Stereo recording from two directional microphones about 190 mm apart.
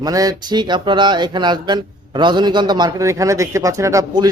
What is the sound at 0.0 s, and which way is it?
A man's voice, 20° right (ahead or behind).